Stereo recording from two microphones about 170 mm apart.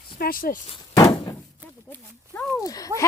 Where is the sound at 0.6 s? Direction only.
25° left (ahead or behind).